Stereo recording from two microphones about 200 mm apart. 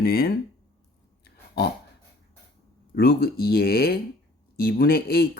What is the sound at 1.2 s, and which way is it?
Dog, 55° left (ahead or behind).